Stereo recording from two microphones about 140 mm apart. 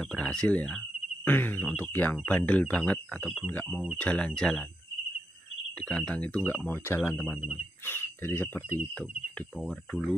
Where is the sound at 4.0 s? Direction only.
10° left (ahead or behind).